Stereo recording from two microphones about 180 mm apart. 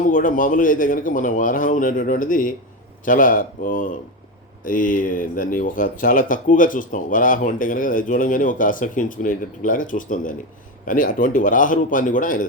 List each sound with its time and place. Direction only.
0.0 s speech: 50° left (ahead or behind)